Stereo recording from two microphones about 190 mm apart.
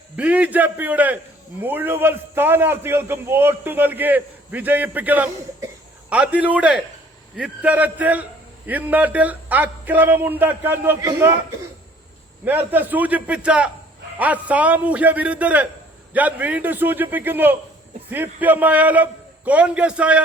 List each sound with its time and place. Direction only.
0.2 s a man's voice: 5° right (ahead or behind)
12.5 s a man's voice: 10° right (ahead or behind)